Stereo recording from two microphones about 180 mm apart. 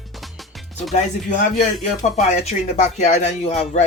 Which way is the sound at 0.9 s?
40° left (ahead or behind).